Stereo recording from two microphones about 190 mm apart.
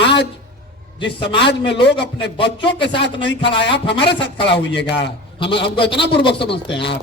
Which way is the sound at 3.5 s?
65° left (ahead or behind).